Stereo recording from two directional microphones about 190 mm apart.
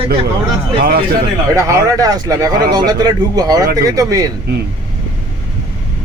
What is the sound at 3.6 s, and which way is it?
Speech, 55° right (ahead or behind).